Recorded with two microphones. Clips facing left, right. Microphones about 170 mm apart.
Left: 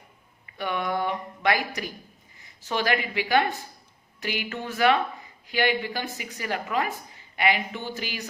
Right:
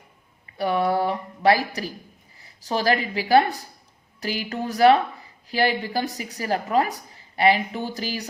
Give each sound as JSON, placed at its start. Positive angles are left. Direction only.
{"t": 0.5, "sound": "a woman's voice", "side_deg": -35}